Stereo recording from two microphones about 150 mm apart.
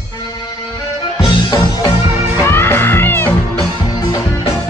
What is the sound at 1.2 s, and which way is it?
Music, 35° left (ahead or behind).